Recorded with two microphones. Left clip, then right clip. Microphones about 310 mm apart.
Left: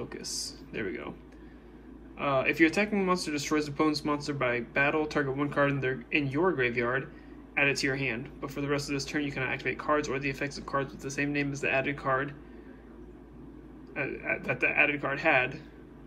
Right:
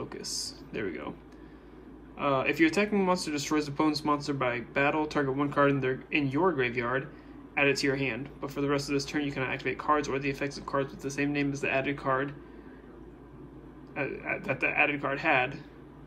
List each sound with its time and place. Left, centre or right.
0.0 s speech: centre
2.1 s speech: centre
13.9 s speech: centre